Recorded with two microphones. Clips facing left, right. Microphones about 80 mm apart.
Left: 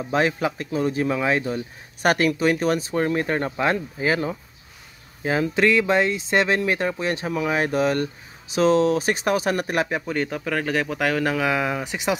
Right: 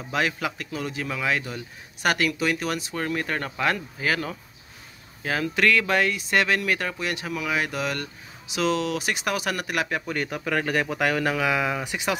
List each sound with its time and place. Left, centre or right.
0.1 s speech: left
10.0 s speech: centre
11.8 s speech: left